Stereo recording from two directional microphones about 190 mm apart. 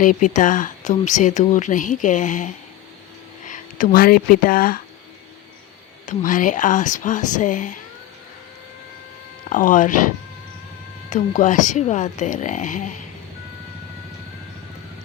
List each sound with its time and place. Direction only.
0.0 s speech: 45° left (ahead or behind)
6.1 s speech: 45° left (ahead or behind)
9.5 s speech: 45° left (ahead or behind)
11.1 s speech: 40° left (ahead or behind)